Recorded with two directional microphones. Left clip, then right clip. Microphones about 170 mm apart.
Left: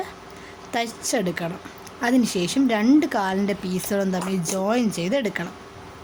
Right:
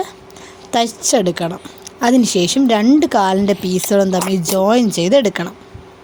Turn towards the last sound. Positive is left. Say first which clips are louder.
# right 11 dB
turn(degrees=-40)  # may be behind; listen again after turning